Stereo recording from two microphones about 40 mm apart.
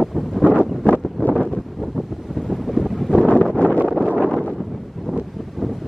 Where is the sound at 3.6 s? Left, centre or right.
Right.